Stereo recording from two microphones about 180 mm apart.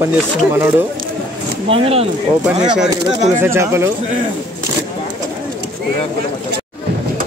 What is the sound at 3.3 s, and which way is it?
Speech, 15° right (ahead or behind).